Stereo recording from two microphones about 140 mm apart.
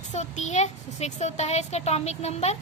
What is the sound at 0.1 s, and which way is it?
A woman's voice, 55° left (ahead or behind).